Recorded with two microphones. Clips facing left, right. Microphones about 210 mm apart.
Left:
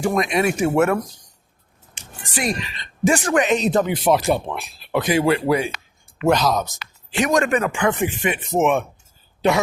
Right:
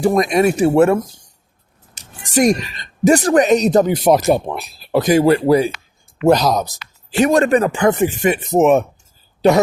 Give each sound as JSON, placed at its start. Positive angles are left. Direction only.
{"t": 0.0, "sound": "speech", "side_deg": -35}
{"t": 2.0, "sound": "speech", "side_deg": -45}